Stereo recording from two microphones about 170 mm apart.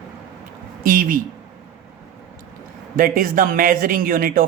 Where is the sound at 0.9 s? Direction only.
55° right (ahead or behind).